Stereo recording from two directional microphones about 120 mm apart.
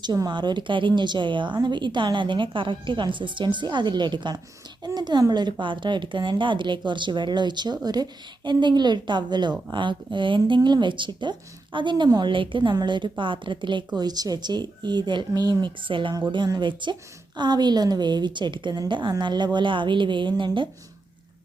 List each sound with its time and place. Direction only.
0.0 s a woman's voice: 35° right (ahead or behind)